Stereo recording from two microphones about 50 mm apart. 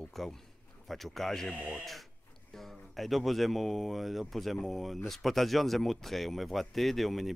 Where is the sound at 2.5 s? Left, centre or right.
Centre.